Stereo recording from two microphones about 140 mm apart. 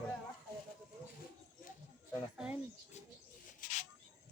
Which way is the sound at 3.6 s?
70° left (ahead or behind).